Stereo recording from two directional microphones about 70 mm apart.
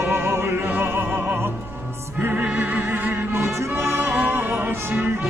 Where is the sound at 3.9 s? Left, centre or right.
Centre.